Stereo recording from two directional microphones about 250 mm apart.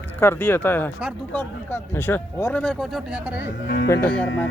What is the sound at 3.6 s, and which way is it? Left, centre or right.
Speech, left.